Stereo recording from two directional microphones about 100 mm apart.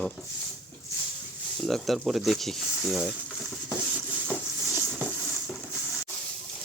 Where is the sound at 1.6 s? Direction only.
Centre (ahead or behind).